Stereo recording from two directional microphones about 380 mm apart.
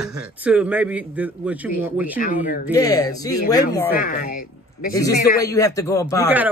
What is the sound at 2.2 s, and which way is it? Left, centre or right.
Speech, left.